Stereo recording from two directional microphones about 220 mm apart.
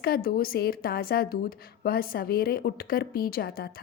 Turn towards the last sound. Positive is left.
turn(degrees=45)  # may be behind; listen again after turning